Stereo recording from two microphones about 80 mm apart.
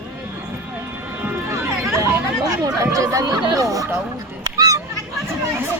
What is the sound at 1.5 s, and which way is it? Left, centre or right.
Hubbub, right.